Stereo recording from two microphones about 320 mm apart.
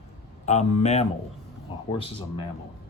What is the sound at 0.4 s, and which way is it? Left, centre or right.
Speech, left.